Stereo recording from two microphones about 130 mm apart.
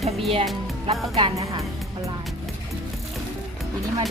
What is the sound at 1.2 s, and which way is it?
Speech, 40° right (ahead or behind).